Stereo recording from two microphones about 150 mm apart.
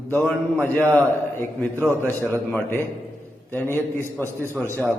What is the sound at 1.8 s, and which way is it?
Speech, 20° right (ahead or behind).